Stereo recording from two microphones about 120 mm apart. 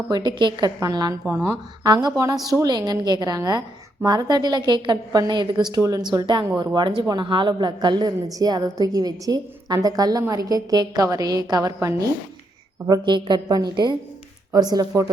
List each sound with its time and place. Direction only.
0.1 s a woman's voice: 35° right (ahead or behind)
12.9 s a woman's voice: 40° right (ahead or behind)